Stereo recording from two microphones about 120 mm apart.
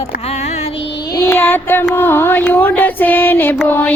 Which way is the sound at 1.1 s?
25° left (ahead or behind).